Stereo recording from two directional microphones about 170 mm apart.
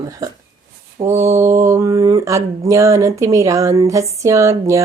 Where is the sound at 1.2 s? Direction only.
15° right (ahead or behind).